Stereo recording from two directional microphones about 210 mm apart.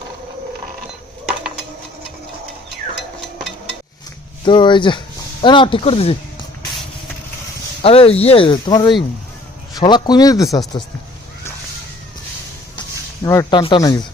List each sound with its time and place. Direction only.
4.4 s speech: 20° left (ahead or behind)
7.8 s speech: 25° left (ahead or behind)
13.2 s speech: 15° left (ahead or behind)